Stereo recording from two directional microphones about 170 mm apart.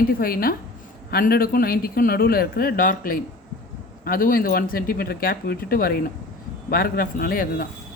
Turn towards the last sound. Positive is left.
turn(degrees=60)  # may be behind; listen again after turning